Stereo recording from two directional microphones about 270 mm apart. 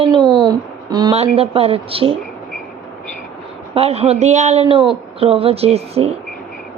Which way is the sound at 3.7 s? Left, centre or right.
Right.